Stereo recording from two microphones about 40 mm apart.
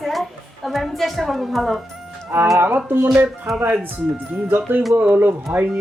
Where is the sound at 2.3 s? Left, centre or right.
Right.